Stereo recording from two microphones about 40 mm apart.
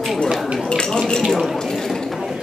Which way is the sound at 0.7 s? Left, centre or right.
Centre.